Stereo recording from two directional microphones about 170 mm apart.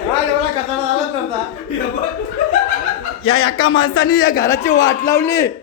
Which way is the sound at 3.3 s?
30° left (ahead or behind).